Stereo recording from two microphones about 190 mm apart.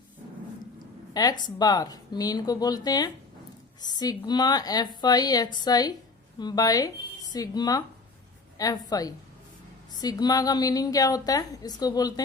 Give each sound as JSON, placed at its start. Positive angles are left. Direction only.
{"t": 1.1, "sound": "a woman's voice", "side_deg": 20}